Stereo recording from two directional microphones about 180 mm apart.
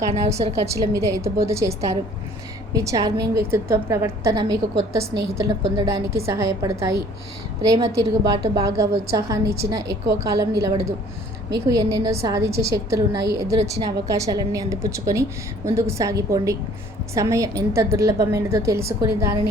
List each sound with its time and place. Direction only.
0.1 s a woman's voice: 35° right (ahead or behind)
0.6 s a woman's voice: 15° right (ahead or behind)